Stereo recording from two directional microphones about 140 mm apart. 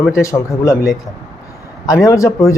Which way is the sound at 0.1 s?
20° left (ahead or behind).